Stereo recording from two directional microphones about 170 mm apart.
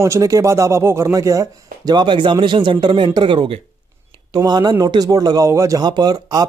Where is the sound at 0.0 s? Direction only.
20° right (ahead or behind).